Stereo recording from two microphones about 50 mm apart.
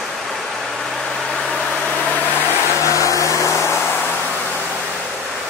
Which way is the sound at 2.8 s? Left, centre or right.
Left.